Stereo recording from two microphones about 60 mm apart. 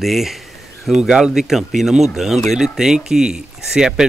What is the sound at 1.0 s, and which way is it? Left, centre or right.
Speech, centre.